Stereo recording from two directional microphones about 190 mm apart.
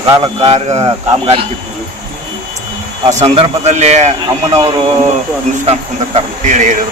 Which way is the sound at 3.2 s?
35° right (ahead or behind).